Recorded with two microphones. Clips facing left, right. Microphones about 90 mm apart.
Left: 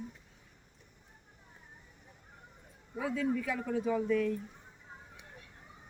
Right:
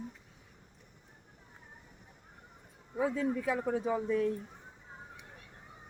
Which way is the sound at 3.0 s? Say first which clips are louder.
Right 1 dB; 30° right (ahead or behind).